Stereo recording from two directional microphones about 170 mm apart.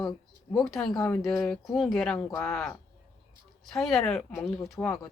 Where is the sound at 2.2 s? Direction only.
15° left (ahead or behind).